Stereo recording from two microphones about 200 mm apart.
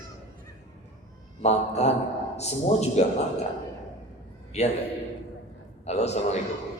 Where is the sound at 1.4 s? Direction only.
35° left (ahead or behind).